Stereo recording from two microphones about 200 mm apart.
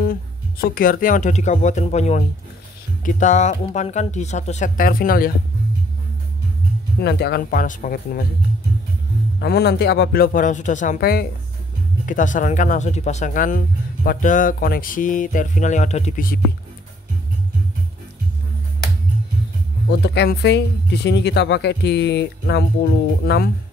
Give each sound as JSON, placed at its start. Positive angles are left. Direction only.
{"t": 0.0, "sound": "speech", "side_deg": 45}
{"t": 7.0, "sound": "speech", "side_deg": 55}
{"t": 9.4, "sound": "speech", "side_deg": 55}
{"t": 19.9, "sound": "speech", "side_deg": 55}